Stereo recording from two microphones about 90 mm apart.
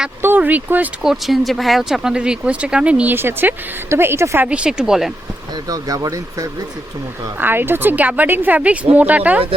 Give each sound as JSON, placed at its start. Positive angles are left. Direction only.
{"t": 0.2, "sound": "speech", "side_deg": -20}
{"t": 1.0, "sound": "speech", "side_deg": 0}
{"t": 4.4, "sound": "speech", "side_deg": -10}
{"t": 5.6, "sound": "speech", "side_deg": -45}
{"t": 7.3, "sound": "speech", "side_deg": -25}